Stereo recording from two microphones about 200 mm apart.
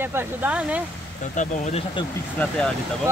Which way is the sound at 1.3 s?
35° left (ahead or behind).